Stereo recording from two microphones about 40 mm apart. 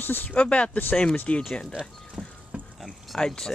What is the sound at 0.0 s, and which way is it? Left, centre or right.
Speech, left.